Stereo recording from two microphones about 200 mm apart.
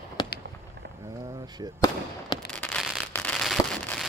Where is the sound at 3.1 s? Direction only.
5° left (ahead or behind).